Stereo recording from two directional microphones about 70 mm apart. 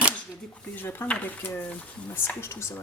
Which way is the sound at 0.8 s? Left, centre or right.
Left.